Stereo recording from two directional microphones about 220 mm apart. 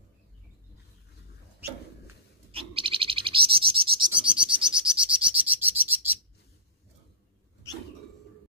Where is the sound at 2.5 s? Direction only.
25° right (ahead or behind).